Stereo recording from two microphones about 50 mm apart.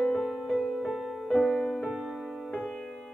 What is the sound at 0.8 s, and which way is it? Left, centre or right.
Music, centre.